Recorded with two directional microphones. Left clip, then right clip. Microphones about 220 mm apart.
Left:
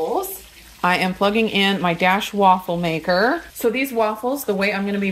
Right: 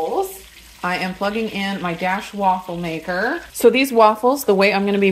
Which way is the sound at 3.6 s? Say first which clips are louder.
Right 8 dB; 35° right (ahead or behind).